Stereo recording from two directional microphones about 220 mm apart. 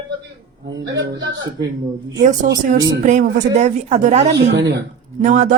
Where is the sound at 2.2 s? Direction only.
35° right (ahead or behind).